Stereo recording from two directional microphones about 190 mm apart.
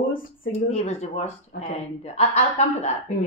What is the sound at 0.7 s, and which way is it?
Speech, 35° left (ahead or behind).